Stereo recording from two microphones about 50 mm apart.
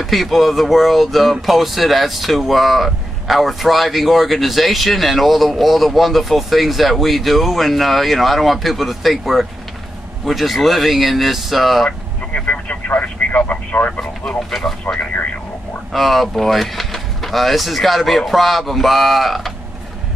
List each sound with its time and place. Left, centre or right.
0.0 s speech: centre
12.4 s speech: left
13.9 s speech: centre